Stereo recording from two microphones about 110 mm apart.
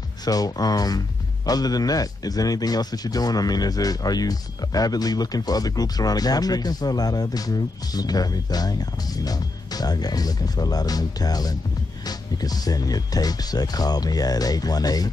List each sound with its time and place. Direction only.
0.2 s speech: 35° left (ahead or behind)